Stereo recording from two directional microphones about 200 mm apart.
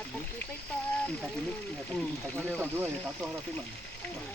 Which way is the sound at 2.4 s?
10° right (ahead or behind).